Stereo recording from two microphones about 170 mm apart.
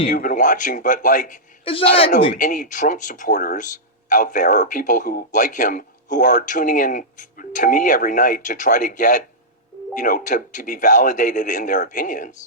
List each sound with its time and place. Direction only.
0.1 s a man's voice: 50° left (ahead or behind)
1.6 s speech: 35° left (ahead or behind)
2.3 s a man's voice: 50° left (ahead or behind)